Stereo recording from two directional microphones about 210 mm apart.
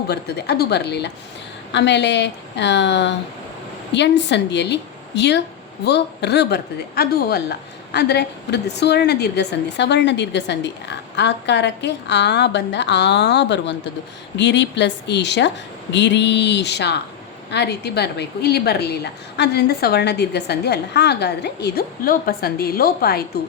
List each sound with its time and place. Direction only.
0.1 s a woman's voice: 50° left (ahead or behind)